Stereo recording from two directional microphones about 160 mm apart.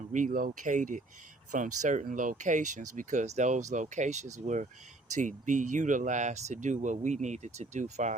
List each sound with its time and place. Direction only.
0.1 s speech: 55° right (ahead or behind)